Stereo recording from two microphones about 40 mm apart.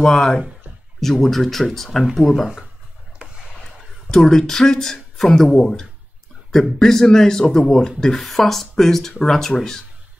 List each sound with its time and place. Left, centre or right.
0.1 s speech: centre
2.0 s speech: centre
3.2 s a sound: right
4.1 s speech: centre